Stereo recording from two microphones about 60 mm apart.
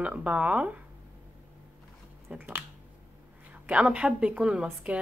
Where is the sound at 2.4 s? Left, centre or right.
Right.